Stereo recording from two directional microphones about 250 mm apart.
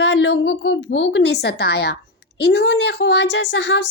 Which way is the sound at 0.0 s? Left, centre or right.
Left.